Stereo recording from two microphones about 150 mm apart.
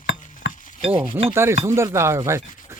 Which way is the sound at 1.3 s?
15° right (ahead or behind).